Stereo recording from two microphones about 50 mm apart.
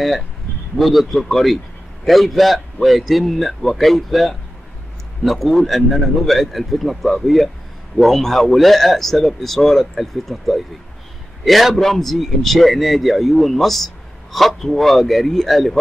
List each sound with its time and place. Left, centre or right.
0.7 s a man's voice: centre